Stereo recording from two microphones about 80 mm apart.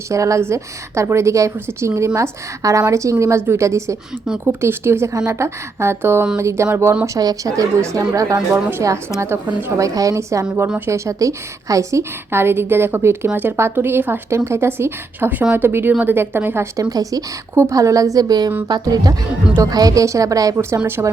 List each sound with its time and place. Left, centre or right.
0.1 s a woman's voice: right
7.0 s a woman's voice: right
16.9 s speech: right
17.5 s speech: right
21.0 s a woman's voice: right